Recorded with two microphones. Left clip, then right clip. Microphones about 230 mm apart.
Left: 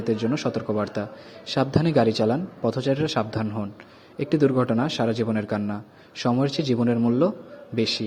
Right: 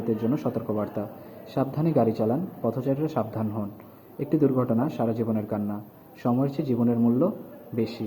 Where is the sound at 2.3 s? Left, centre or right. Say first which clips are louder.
Left 3 dB; left.